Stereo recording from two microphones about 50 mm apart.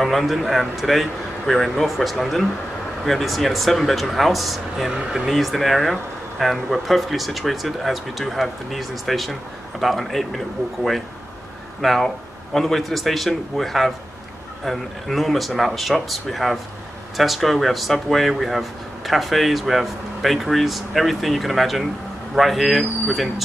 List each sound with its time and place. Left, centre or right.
0.0 s speech: centre
4.9 s speech: centre
5.3 s speech: centre